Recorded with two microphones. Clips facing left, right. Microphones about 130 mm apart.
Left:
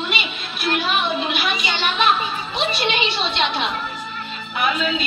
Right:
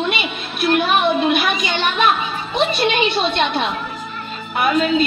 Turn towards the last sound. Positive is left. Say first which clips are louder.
# right 5 dB
turn(degrees=-45)  # may be behind; listen again after turning